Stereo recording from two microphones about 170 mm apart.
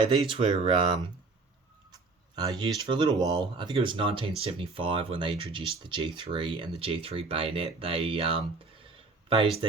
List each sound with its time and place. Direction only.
0.0 s speech: 30° right (ahead or behind)
1.9 s a sound: 25° right (ahead or behind)
2.6 s speech: 25° right (ahead or behind)